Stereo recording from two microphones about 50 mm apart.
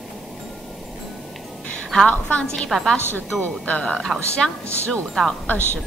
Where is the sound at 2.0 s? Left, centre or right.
Left.